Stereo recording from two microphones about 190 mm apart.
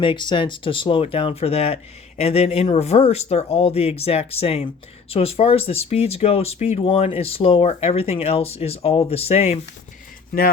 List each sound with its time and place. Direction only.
0.0 s speech: 25° left (ahead or behind)